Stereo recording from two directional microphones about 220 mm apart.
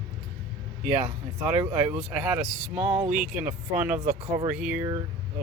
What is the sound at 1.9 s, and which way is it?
Speech, 5° right (ahead or behind).